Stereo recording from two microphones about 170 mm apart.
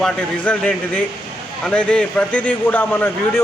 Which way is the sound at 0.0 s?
5° left (ahead or behind).